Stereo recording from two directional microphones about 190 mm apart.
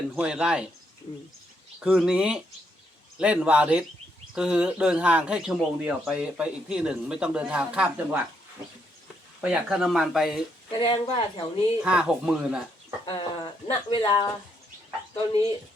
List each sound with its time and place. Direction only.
0.2 s speech: 5° right (ahead or behind)
1.8 s a man's voice: 5° right (ahead or behind)
9.4 s speech: 5° right (ahead or behind)
10.8 s speech: 25° left (ahead or behind)
11.8 s speech: 5° right (ahead or behind)
13.1 s speech: 25° left (ahead or behind)